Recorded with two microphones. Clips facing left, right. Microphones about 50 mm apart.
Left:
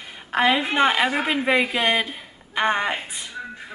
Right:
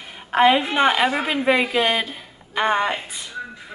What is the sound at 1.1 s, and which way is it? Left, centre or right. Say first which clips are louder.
A woman's voice: right 1 dB; centre.